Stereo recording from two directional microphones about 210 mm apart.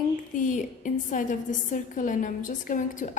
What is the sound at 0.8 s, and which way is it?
A woman's voice, 40° left (ahead or behind).